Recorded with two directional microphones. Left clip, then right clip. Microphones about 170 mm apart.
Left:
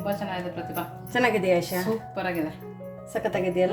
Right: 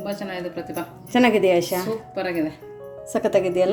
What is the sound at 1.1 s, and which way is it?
Speech, 35° right (ahead or behind).